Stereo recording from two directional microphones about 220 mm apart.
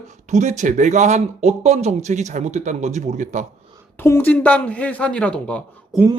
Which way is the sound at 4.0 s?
10° left (ahead or behind).